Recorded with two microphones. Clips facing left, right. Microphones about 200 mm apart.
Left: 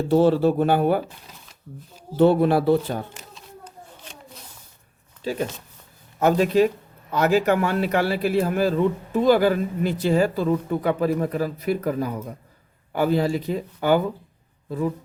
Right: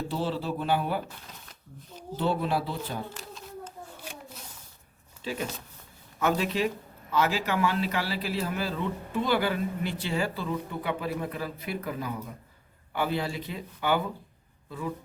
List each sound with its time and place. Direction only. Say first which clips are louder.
0.1 s speech: left 17 dB; 55° left (ahead or behind)
2.1 s speech: left 11 dB; 55° left (ahead or behind)
5.2 s a man's voice: left 7 dB; 40° left (ahead or behind)